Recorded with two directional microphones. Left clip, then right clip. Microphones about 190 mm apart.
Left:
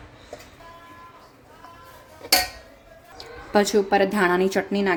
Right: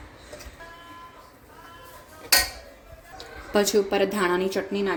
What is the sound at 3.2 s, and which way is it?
A woman's voice, 25° left (ahead or behind).